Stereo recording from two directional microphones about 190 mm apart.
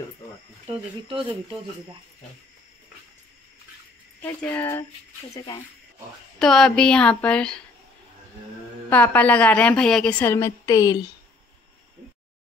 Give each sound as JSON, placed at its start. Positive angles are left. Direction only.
{"t": 0.7, "sound": "speech", "side_deg": -30}
{"t": 4.2, "sound": "a woman's voice", "side_deg": 10}
{"t": 6.4, "sound": "a woman's voice", "side_deg": 5}
{"t": 8.9, "sound": "a woman's voice", "side_deg": 10}